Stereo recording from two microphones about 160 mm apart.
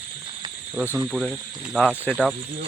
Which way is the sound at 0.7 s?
15° right (ahead or behind).